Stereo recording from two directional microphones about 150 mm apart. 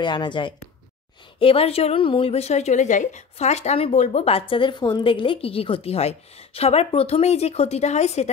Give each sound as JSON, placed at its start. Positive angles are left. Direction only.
{"t": 0.0, "sound": "a woman's voice", "side_deg": 30}